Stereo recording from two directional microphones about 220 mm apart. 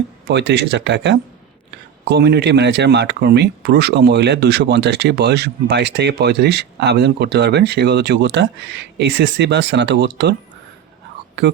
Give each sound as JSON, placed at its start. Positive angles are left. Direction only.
{"t": 0.3, "sound": "speech", "side_deg": -50}